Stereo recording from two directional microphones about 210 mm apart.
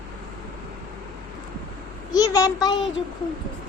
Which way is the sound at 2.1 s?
15° left (ahead or behind).